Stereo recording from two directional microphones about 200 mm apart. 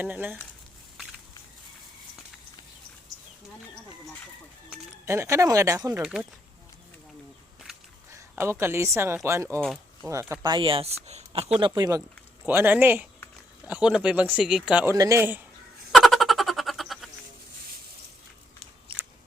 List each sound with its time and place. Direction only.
0.0 s speech: 10° right (ahead or behind)
4.7 s speech: 15° right (ahead or behind)
6.0 s speech: 5° right (ahead or behind)
8.4 s speech: 10° right (ahead or behind)
9.6 s speech: 5° left (ahead or behind)
10.1 s speech: 15° right (ahead or behind)
12.5 s speech: 10° right (ahead or behind)
15.9 s frog: centre (ahead or behind)
18.9 s scissors: 25° right (ahead or behind)